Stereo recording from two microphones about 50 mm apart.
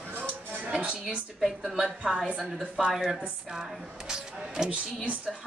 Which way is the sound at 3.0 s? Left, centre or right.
Centre.